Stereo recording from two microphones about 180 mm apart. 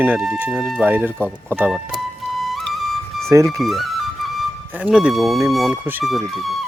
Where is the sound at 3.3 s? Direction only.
15° right (ahead or behind).